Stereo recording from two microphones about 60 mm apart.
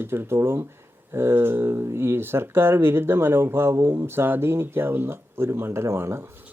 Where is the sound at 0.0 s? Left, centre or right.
Right.